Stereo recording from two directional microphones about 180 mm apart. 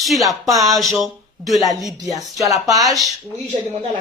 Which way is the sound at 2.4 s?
20° right (ahead or behind).